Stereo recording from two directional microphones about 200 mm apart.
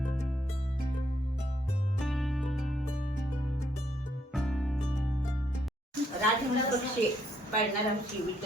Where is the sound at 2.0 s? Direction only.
Centre (ahead or behind).